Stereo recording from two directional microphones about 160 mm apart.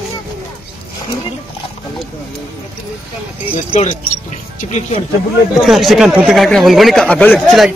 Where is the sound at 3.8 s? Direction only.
50° left (ahead or behind).